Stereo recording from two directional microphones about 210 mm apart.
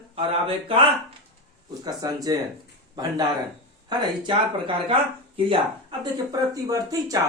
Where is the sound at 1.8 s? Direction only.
20° right (ahead or behind).